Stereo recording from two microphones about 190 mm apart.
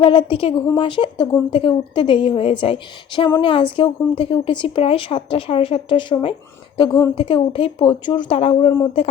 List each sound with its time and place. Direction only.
0.0 s speech: 30° left (ahead or behind)